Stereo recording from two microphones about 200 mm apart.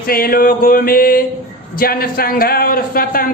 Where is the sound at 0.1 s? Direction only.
45° left (ahead or behind).